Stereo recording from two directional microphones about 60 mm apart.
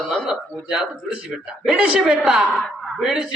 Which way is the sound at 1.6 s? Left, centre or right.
Centre.